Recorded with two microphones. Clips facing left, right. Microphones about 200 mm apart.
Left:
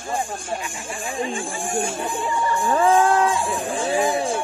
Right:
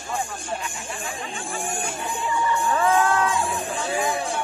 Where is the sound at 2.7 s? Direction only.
30° left (ahead or behind).